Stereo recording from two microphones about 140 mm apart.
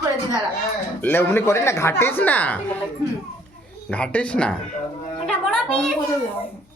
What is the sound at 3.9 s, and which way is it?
Speech, 10° left (ahead or behind).